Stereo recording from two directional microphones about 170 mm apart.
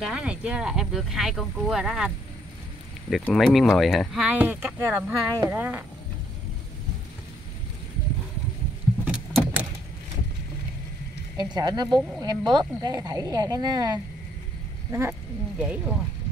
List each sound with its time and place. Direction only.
0.0 s speech: 5° right (ahead or behind)
9.0 s vehicle: 5° right (ahead or behind)
11.3 s speech: 25° right (ahead or behind); by 16.0 s 5° right (ahead or behind)